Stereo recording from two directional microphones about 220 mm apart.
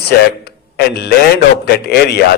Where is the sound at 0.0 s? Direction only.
45° left (ahead or behind).